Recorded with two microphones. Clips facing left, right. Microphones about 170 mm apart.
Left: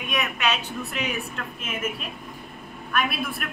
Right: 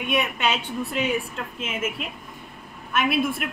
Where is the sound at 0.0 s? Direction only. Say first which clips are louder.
Right 3 dB; 25° right (ahead or behind).